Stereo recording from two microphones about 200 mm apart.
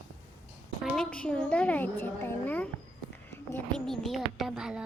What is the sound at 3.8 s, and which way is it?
Speech, centre (ahead or behind).